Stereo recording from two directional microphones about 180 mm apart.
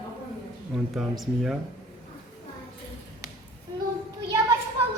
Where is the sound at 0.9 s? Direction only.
Centre (ahead or behind).